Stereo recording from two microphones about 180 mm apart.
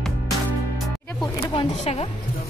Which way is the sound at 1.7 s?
35° left (ahead or behind).